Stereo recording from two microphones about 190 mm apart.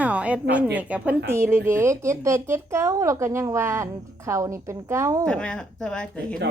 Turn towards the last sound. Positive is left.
turn(degrees=5)  # may be behind; listen again after turning